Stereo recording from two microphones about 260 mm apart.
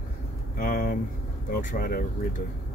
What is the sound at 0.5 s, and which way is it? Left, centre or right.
Speech, left.